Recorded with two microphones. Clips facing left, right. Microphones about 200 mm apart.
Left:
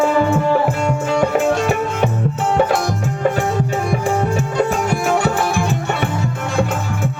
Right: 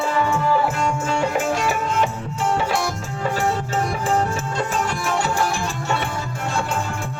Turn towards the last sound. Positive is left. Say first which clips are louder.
# left 5 dB
turn(degrees=60)  # may be behind; listen again after turning